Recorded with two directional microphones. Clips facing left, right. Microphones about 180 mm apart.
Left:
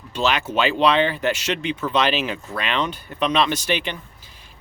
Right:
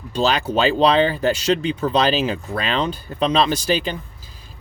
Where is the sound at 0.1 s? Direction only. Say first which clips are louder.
Right 3 dB; 35° right (ahead or behind).